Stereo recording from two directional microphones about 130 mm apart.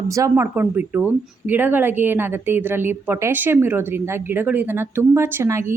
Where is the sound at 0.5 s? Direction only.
15° right (ahead or behind).